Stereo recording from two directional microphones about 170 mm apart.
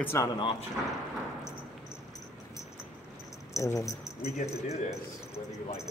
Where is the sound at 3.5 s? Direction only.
20° left (ahead or behind).